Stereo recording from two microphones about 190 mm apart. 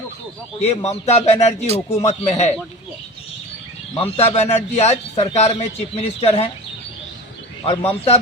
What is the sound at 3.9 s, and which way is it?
A man's voice, 30° left (ahead or behind).